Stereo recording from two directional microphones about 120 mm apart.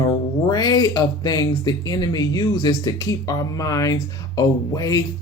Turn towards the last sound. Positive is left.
turn(degrees=30)  # may be behind; listen again after turning